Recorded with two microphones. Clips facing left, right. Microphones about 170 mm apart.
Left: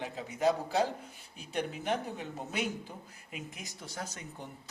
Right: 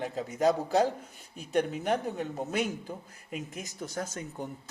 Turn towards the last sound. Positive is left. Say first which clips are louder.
# right 6 dB
turn(degrees=-45)  # may be behind; listen again after turning